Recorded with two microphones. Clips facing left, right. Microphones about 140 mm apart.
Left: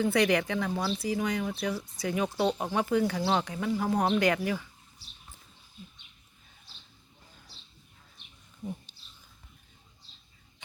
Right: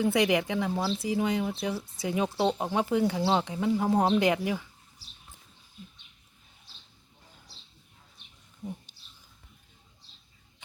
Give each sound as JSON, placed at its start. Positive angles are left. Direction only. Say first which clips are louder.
{"t": 0.0, "sound": "speech", "louder": "even", "side_deg": -20}